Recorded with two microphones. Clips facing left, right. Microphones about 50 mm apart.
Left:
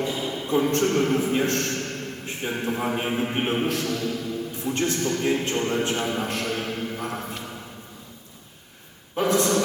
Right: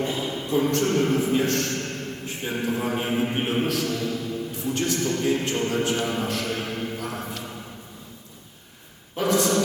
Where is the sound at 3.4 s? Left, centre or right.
Left.